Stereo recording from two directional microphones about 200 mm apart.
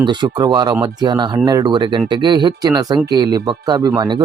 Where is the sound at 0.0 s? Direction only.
20° right (ahead or behind).